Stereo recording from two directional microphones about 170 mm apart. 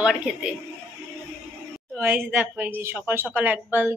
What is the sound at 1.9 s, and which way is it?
A woman's voice, 10° right (ahead or behind).